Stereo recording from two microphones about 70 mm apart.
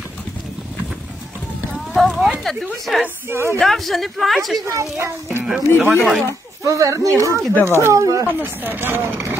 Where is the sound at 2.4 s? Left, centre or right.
Centre.